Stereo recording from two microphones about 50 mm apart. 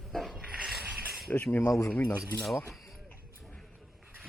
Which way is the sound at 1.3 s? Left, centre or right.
Left.